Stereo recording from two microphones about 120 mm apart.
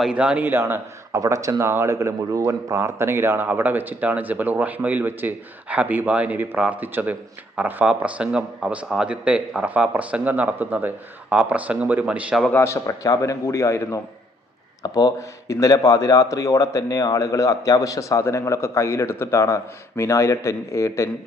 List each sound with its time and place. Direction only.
0.0 s speech: 10° right (ahead or behind)
12.4 s a man's voice: 10° left (ahead or behind)
12.6 s speech: 25° left (ahead or behind)